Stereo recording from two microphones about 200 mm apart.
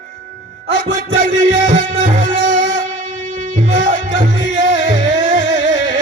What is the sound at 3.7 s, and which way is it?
Music, 40° right (ahead or behind).